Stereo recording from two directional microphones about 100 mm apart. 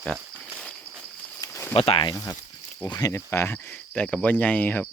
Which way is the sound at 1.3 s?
30° left (ahead or behind).